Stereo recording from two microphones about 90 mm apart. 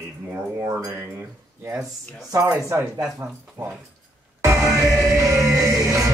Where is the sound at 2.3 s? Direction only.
35° right (ahead or behind).